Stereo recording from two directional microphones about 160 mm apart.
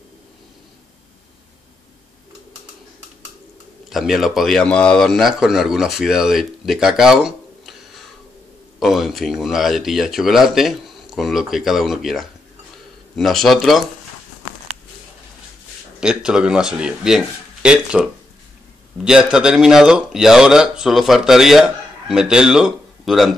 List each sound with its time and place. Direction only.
3.9 s speech: centre (ahead or behind)
16.0 s speech: 5° right (ahead or behind)